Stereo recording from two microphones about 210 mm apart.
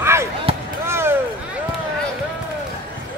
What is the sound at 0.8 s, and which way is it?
Vehicle, 10° right (ahead or behind).